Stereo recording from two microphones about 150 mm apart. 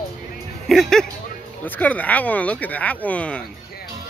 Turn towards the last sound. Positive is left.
turn(degrees=10)  # may be behind; listen again after turning